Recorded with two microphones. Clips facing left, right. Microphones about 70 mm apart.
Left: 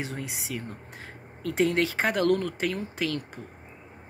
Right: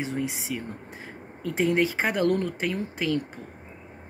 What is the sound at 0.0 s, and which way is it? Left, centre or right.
Speech, centre.